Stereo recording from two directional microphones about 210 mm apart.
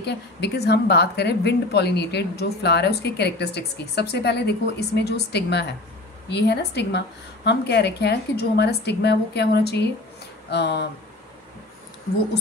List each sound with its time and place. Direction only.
0.0 s a woman's voice: 55° left (ahead or behind)